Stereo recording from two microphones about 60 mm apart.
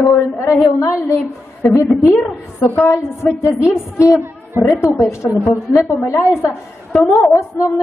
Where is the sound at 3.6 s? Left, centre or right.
Left.